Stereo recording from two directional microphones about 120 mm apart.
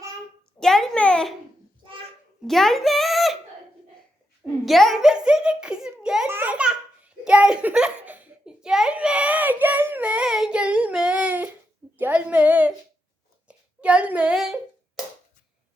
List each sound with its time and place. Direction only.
0.6 s a child's voice: 5° left (ahead or behind)
2.5 s speech: centre (ahead or behind)
4.6 s a child's voice: centre (ahead or behind)
6.2 s a child's voice: 15° right (ahead or behind)